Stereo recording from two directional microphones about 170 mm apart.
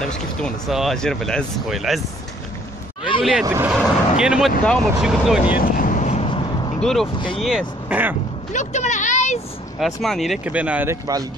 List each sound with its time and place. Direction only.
0.4 s speech: centre (ahead or behind)
3.2 s speech: centre (ahead or behind)
3.4 s speech: 15° right (ahead or behind)
3.7 s speech: 5° right (ahead or behind)
5.8 s vehicle: 50° left (ahead or behind); by 6.8 s 30° left (ahead or behind)
6.8 s speech: centre (ahead or behind)
8.5 s a sound: 45° left (ahead or behind)
9.8 s speech: centre (ahead or behind)